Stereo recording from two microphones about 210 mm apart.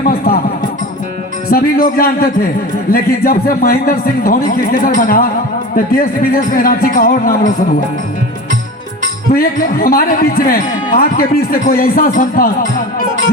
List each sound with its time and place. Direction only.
0.0 s speech: 45° left (ahead or behind)
1.5 s speech: 45° left (ahead or behind)
9.3 s speech: 45° left (ahead or behind)